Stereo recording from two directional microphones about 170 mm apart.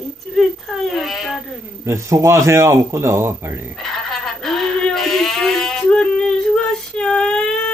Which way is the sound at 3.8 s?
Centre (ahead or behind).